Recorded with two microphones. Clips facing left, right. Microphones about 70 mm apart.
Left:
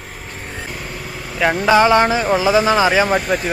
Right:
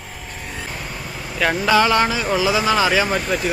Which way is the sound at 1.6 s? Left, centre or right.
Left.